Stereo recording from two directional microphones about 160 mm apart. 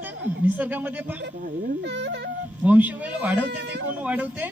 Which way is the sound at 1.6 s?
90° right.